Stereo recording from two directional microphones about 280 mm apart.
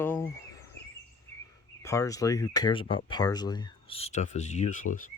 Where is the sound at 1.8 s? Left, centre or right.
Centre; by 5.1 s left.